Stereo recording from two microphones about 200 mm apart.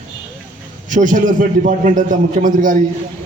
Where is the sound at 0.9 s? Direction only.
40° right (ahead or behind).